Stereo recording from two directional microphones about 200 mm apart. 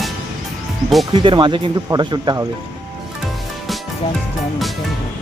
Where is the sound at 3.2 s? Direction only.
Centre (ahead or behind).